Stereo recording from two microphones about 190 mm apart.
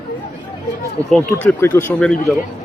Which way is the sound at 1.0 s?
5° left (ahead or behind).